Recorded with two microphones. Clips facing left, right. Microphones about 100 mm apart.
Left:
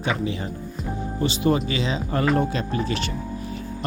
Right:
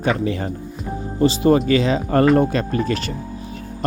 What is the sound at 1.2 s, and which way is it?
Speech, 40° right (ahead or behind).